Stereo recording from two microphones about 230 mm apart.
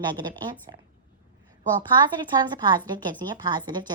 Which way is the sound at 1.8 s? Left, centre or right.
Centre.